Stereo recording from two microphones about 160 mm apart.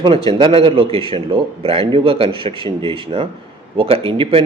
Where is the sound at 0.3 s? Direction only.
35° right (ahead or behind).